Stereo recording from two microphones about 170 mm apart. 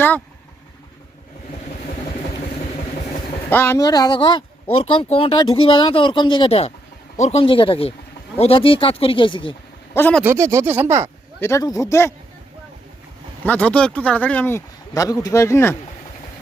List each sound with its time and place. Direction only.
3.5 s speech: 15° left (ahead or behind); by 9.6 s 30° left (ahead or behind)
9.9 s a man's voice: 10° left (ahead or behind)
10.2 s speech: 15° right (ahead or behind)
11.3 s speech: 15° left (ahead or behind)
13.4 s speech: 10° left (ahead or behind)